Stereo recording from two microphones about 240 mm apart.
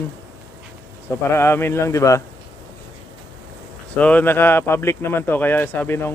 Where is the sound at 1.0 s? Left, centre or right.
Centre.